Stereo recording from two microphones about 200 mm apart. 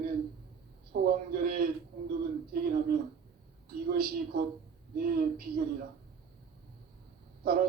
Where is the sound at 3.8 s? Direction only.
50° right (ahead or behind).